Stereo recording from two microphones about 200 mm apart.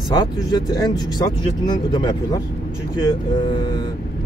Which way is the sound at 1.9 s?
20° left (ahead or behind).